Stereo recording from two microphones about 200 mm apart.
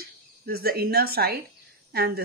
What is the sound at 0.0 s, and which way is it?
Speech, 50° right (ahead or behind).